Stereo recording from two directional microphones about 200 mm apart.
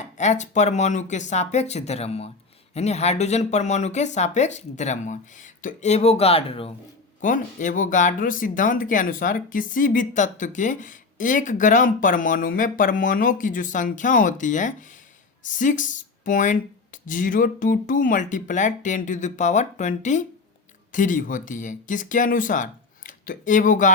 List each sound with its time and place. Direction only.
0.2 s speech: 35° left (ahead or behind)
7.2 s speech: 40° left (ahead or behind)